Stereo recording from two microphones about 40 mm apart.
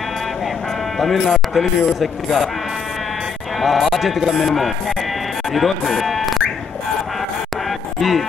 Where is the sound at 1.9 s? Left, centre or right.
Centre.